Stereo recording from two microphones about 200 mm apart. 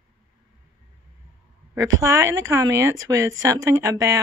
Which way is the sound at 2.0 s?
15° right (ahead or behind).